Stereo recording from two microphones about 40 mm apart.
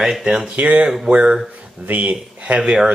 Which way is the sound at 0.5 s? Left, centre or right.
Right.